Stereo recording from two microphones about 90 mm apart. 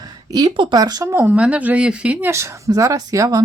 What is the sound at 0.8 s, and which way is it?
Speech, 45° right (ahead or behind).